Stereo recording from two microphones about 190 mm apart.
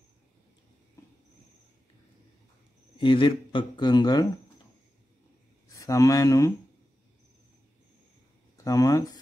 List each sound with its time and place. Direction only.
3.0 s a man's voice: 25° left (ahead or behind)
5.7 s speech: 15° left (ahead or behind)
8.5 s speech: 15° left (ahead or behind)